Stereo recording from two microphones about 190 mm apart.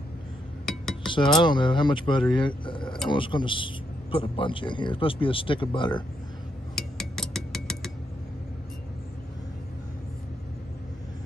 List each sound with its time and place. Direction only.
0.7 s dishes: centre (ahead or behind)
1.0 s a man's voice: 25° left (ahead or behind)
6.7 s a sound: centre (ahead or behind)